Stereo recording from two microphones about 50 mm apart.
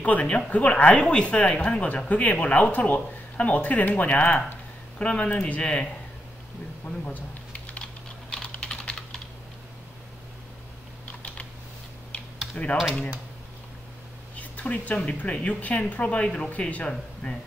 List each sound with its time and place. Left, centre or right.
0.0 s speech: left
7.8 s typing: centre
12.6 s speech: left
14.3 s a sound: left
15.0 s speech: left